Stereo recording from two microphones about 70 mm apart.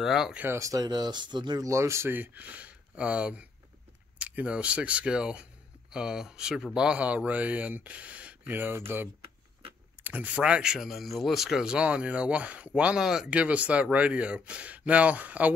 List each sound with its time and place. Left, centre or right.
0.0 s speech: centre
0.6 s speech: right
0.8 s speech: right
1.7 s speech: right
2.1 s speech: right
8.5 s speech: right
10.0 s speech: right
13.3 s speech: centre